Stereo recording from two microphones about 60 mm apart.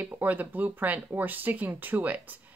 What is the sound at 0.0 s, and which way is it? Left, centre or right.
Speech, right.